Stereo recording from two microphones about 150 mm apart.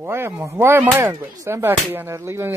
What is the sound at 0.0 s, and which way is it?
Speech, 15° right (ahead or behind).